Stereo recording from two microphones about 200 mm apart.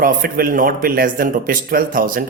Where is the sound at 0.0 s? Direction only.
45° right (ahead or behind).